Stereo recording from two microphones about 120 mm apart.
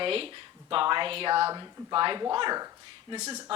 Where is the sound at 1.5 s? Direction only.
35° right (ahead or behind).